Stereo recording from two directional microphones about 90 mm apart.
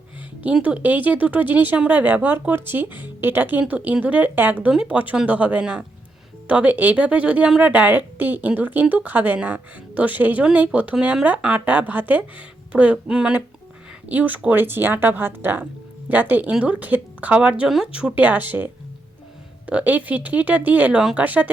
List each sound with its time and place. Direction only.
0.4 s a woman's voice: 15° right (ahead or behind)